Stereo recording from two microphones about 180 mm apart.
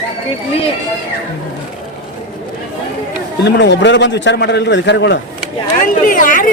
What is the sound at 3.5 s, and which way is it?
A man's voice, 70° left (ahead or behind).